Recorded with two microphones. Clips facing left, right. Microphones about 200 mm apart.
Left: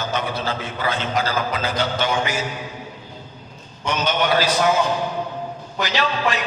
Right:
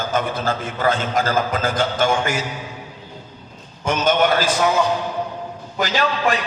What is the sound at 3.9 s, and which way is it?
Speech, 50° right (ahead or behind).